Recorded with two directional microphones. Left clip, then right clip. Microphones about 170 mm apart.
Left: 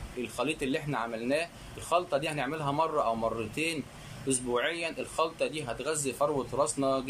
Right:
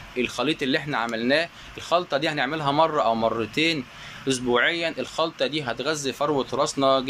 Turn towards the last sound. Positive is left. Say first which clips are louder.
# right 8 dB
turn(degrees=5)  # may be behind; listen again after turning